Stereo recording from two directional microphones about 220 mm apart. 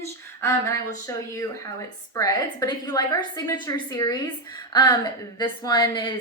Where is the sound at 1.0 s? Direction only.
15° left (ahead or behind).